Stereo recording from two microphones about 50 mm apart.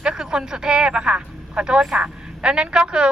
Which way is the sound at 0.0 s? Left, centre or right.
Centre.